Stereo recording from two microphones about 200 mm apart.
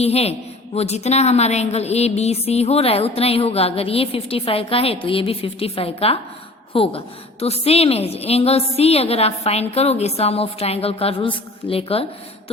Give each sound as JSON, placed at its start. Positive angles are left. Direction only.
{"t": 0.0, "sound": "a woman's voice", "side_deg": 30}